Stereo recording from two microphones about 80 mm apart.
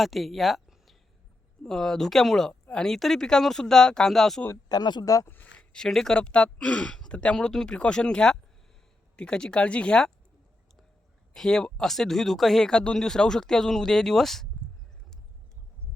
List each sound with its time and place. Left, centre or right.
0.0 s speech: centre
4.7 s speech: left
5.0 s speech: left
5.3 s speech: left
5.7 s speech: centre
11.3 s speech: centre